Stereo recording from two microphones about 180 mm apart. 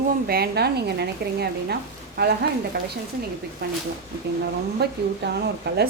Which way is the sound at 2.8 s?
60° right (ahead or behind).